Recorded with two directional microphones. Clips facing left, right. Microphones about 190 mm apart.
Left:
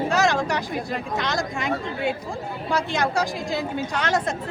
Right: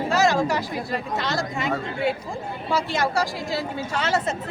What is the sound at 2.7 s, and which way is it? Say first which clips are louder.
Speech: even; centre (ahead or behind).